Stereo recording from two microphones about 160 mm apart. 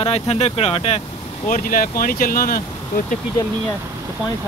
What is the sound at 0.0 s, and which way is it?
Speech, 40° left (ahead or behind).